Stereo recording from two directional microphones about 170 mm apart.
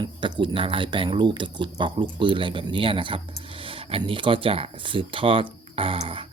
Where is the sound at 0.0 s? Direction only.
30° right (ahead or behind).